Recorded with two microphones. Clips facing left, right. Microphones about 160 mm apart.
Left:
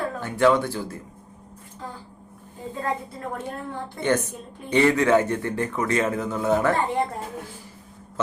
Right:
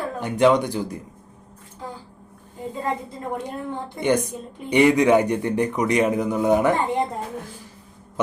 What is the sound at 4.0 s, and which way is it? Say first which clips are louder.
Speech: right 2 dB; 15° right (ahead or behind).